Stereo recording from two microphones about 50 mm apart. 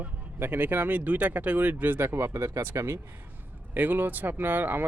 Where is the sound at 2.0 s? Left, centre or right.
Right.